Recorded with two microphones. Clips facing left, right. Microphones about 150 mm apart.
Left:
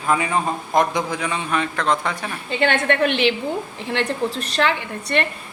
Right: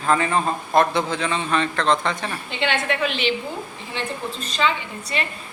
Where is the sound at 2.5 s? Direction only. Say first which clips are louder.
Left 5 dB; 50° left (ahead or behind).